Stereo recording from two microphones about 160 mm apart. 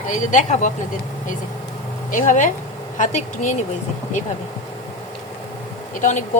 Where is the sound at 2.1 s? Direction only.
55° left (ahead or behind).